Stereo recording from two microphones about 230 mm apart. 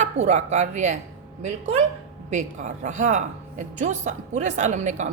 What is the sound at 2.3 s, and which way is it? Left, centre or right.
A woman's voice, right.